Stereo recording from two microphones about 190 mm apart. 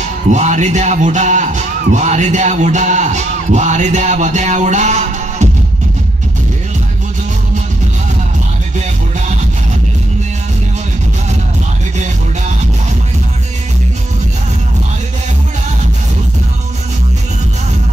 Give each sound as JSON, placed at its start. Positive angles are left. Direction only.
{"t": 0.3, "sound": "speech", "side_deg": -40}